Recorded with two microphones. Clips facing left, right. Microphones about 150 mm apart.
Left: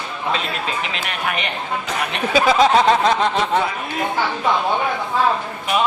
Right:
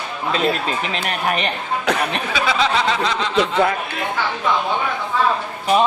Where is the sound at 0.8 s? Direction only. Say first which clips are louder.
Right 2 dB; 40° right (ahead or behind).